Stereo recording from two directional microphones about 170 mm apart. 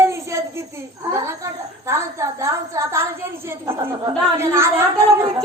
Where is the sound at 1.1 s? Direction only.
15° right (ahead or behind).